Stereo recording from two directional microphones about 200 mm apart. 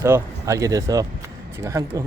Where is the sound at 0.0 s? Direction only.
15° right (ahead or behind).